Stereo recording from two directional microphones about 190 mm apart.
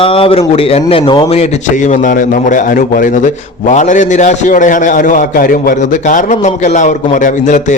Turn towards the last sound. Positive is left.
turn(degrees=40)  # may be behind; listen again after turning